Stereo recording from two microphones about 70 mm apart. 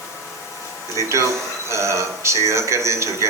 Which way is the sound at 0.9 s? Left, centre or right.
Right.